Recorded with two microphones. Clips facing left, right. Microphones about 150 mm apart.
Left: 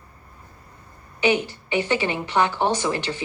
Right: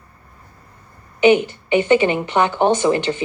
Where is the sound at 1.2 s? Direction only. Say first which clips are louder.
Right 8 dB; 20° right (ahead or behind).